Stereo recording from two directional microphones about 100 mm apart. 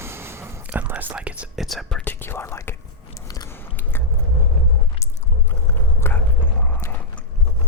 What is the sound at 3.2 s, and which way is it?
Biting, 40° left (ahead or behind).